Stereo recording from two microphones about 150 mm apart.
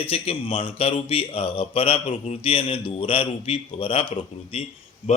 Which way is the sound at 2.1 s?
45° left (ahead or behind).